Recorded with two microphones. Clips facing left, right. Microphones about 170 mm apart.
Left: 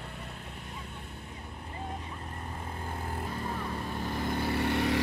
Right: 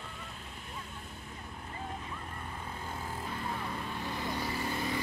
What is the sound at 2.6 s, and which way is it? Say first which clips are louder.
Vehicle: left 3 dB; 55° left (ahead or behind).